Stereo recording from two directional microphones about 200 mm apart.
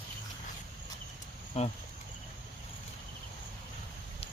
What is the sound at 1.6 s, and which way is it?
Speech, 30° left (ahead or behind).